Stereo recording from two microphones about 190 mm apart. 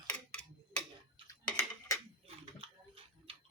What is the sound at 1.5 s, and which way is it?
Dishes, 15° left (ahead or behind).